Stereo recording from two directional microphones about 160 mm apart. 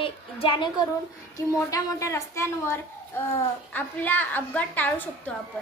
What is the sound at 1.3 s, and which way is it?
A woman's voice, 20° left (ahead or behind).